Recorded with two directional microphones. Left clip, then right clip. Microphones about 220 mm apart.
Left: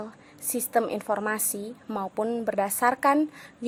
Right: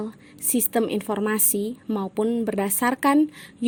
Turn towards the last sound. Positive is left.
turn(degrees=-35)  # may be behind; listen again after turning